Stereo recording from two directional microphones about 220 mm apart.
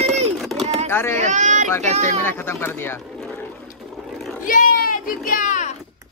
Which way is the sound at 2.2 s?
10° left (ahead or behind).